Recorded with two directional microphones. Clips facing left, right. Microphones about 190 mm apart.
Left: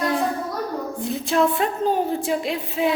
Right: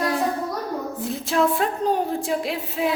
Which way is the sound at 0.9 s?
Centre (ahead or behind).